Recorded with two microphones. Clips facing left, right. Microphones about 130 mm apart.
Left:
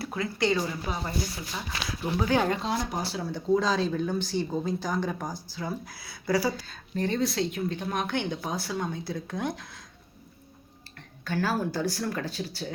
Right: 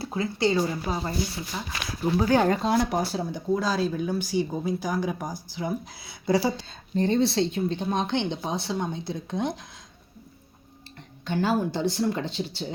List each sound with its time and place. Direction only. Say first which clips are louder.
0.0 s speech: right 3 dB; 30° right (ahead or behind); by 2.7 s 45° right (ahead or behind)
2.7 s speech: right 7 dB; 55° right (ahead or behind)
3.5 s speech: left 1 dB; 5° right (ahead or behind)
11.3 s speech: right 3 dB; 20° right (ahead or behind)